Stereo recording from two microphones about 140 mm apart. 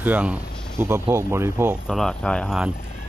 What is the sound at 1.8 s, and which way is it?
Speech, 5° left (ahead or behind).